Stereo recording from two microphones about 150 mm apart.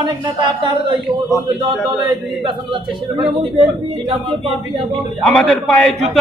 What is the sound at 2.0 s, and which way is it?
A man's voice, 30° right (ahead or behind).